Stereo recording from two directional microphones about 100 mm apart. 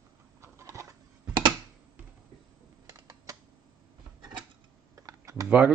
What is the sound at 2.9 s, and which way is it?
Typing, 35° right (ahead or behind).